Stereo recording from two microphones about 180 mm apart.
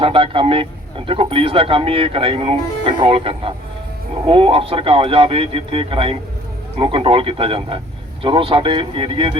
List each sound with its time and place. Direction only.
0.0 s speech: 30° right (ahead or behind)